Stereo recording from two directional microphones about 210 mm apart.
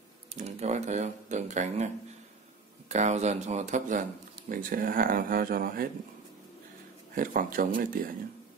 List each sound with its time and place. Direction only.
0.3 s speech: 30° right (ahead or behind)
2.9 s speech: 35° right (ahead or behind)
7.2 s speech: 40° right (ahead or behind)